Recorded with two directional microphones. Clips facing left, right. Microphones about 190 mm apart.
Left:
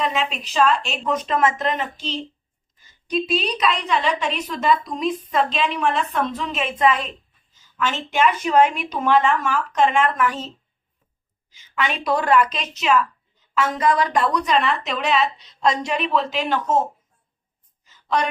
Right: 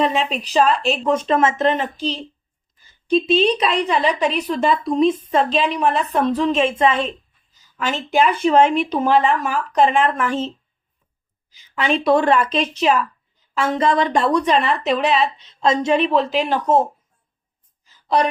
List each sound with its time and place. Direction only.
0.0 s a woman's voice: 30° right (ahead or behind)
7.8 s a woman's voice: 40° right (ahead or behind)
11.5 s a woman's voice: 35° right (ahead or behind)
17.8 s a sound: 35° right (ahead or behind)